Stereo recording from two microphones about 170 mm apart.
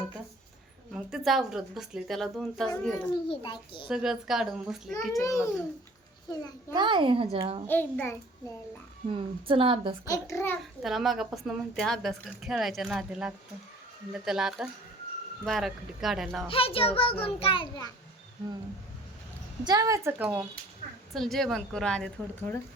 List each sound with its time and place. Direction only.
0.9 s a woman's voice: centre (ahead or behind)
3.2 s a child's voice: 30° left (ahead or behind)
3.8 s a woman's voice: 5° right (ahead or behind)
5.2 s a child's voice: 20° left (ahead or behind)
6.7 s speech: 30° right (ahead or behind)
7.7 s a child's voice: 10° left (ahead or behind)
9.5 s a woman's voice: 30° right (ahead or behind)
10.1 s a child's voice: 15° left (ahead or behind)
10.8 s a woman's voice: centre (ahead or behind)
16.5 s a child's voice: 35° left (ahead or behind)
19.6 s a woman's voice: 20° right (ahead or behind); by 22.5 s 5° left (ahead or behind)